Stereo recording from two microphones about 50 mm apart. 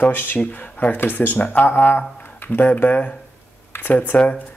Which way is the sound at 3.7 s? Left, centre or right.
Left.